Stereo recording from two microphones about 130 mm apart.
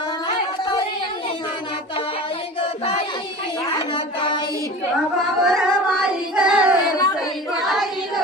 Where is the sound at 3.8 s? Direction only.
40° left (ahead or behind).